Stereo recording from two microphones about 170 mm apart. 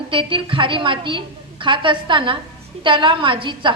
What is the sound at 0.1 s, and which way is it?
A woman's voice, 30° right (ahead or behind).